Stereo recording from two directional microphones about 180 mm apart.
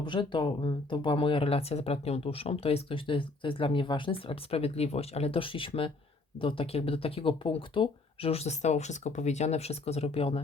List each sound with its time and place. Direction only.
0.0 s speech: 25° left (ahead or behind)